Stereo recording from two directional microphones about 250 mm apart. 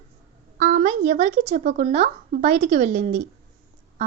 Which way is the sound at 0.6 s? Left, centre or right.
Right.